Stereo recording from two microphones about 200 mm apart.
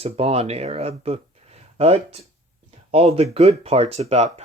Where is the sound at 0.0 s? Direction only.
30° right (ahead or behind).